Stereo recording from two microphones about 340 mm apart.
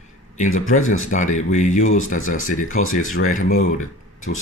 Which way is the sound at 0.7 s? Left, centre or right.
Left.